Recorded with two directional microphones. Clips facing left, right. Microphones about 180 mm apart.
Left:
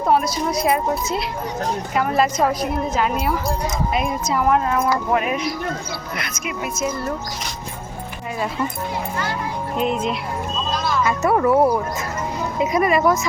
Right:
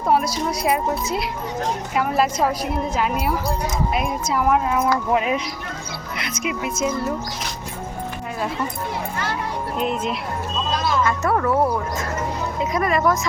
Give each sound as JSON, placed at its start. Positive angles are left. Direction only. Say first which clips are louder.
{"t": 0.1, "sound": "a woman's voice", "louder": "left 1 dB", "side_deg": -5}
{"t": 5.1, "sound": "speech", "louder": "even", "side_deg": -25}
{"t": 9.7, "sound": "a woman's voice", "louder": "left 3 dB", "side_deg": 0}
{"t": 11.0, "sound": "speech", "louder": "left 6 dB", "side_deg": 10}